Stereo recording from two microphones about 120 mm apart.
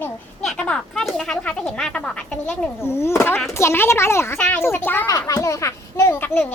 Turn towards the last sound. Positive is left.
turn(degrees=20)  # may be behind; listen again after turning